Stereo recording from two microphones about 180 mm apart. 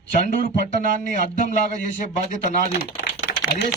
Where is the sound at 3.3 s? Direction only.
55° left (ahead or behind).